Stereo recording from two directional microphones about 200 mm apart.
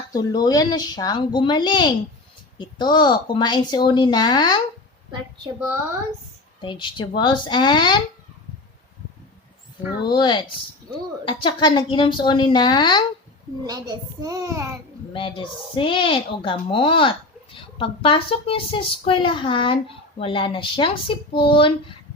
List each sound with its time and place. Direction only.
0.1 s speech: 20° left (ahead or behind)
6.6 s speech: 25° left (ahead or behind)
10.0 s speech: 25° left (ahead or behind)
13.7 s a child's voice: 20° right (ahead or behind)
15.1 s speech: 25° left (ahead or behind)